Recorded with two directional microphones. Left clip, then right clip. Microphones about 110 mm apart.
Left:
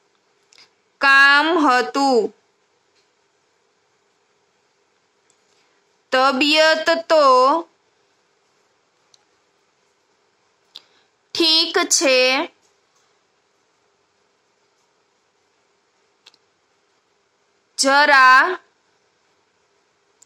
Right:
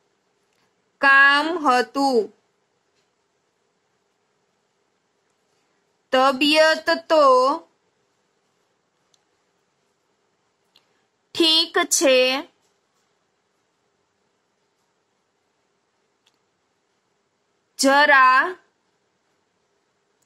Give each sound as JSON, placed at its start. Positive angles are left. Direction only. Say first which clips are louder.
{"t": 0.5, "sound": "speech", "louder": "left 18 dB", "side_deg": 35}
{"t": 6.0, "sound": "speech", "louder": "left 1 dB", "side_deg": 30}
{"t": 10.7, "sound": "a sound", "louder": "left 17 dB", "side_deg": 30}
{"t": 11.3, "sound": "speech", "louder": "left 1 dB", "side_deg": 25}
{"t": 16.3, "sound": "tick", "louder": "left 14 dB", "side_deg": 35}
{"t": 17.7, "sound": "speech", "louder": "left 2 dB", "side_deg": 30}